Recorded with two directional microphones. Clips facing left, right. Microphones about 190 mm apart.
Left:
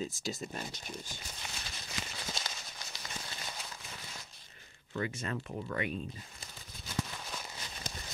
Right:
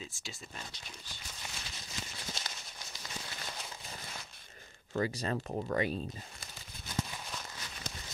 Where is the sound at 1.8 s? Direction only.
85° left.